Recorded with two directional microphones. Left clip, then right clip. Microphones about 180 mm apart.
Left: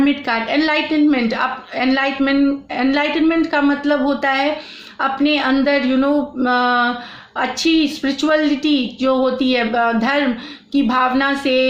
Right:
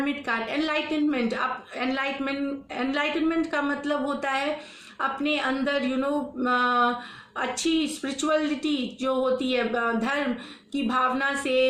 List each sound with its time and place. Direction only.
0.0 s speech: 40° left (ahead or behind)